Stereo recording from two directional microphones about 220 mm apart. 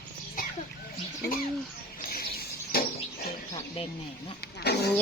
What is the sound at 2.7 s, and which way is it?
Bird, 40° left (ahead or behind).